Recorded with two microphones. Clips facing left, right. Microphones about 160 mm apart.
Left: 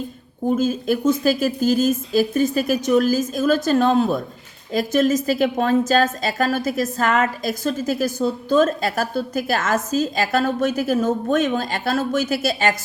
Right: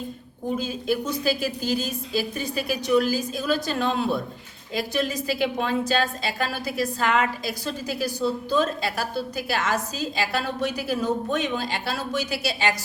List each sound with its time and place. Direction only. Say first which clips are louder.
0.4 s a woman's voice: left 7 dB; 45° left (ahead or behind)